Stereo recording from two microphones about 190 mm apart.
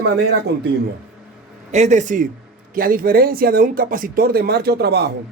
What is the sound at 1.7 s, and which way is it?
Speech, 35° right (ahead or behind).